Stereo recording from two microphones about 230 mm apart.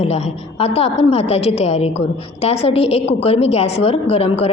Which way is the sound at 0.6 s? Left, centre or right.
Left.